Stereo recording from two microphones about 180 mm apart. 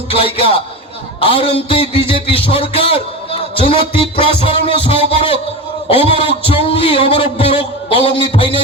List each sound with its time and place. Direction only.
0.1 s a man's voice: 30° left (ahead or behind)
8.2 s music: 30° left (ahead or behind)